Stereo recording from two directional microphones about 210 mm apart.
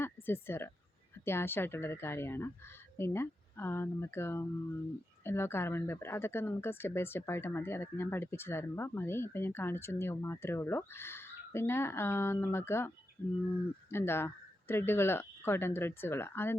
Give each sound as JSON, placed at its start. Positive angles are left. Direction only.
{"t": 0.0, "sound": "a sound", "side_deg": 10}
{"t": 1.2, "sound": "speech", "side_deg": 10}
{"t": 13.9, "sound": "speech", "side_deg": 10}